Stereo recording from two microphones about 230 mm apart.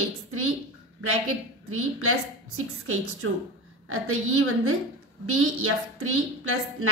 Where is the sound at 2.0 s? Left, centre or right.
Right.